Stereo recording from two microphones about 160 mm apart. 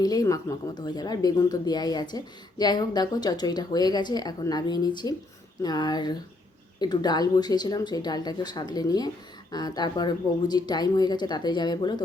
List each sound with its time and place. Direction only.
0.0 s speech: 25° left (ahead or behind)